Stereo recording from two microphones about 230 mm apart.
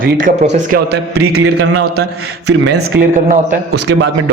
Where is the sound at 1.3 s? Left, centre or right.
Right.